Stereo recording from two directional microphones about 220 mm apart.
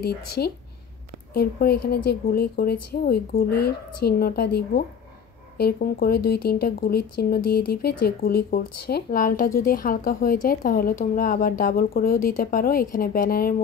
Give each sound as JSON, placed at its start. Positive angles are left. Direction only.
{"t": 0.0, "sound": "speech", "side_deg": 45}